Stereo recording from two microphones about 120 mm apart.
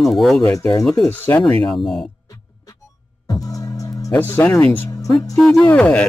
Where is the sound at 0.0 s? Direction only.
Centre (ahead or behind).